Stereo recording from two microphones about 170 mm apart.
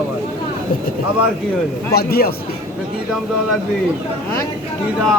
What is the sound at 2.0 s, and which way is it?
Speech, 65° left (ahead or behind).